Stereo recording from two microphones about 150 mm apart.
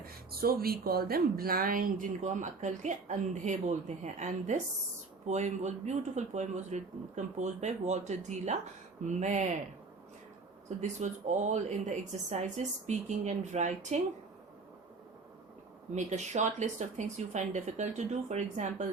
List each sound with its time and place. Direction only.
0.0 s a woman's voice: 90° right; by 9.6 s 55° right (ahead or behind)
10.8 s speech: 50° right (ahead or behind)
15.9 s speech: 50° right (ahead or behind)